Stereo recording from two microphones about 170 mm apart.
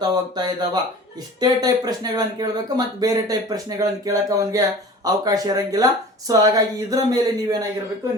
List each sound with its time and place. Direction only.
0.0 s speech: 25° right (ahead or behind)